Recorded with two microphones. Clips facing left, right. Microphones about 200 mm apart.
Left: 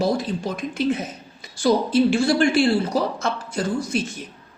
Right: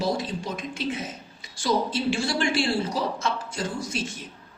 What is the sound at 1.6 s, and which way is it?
A woman's voice, 55° left (ahead or behind).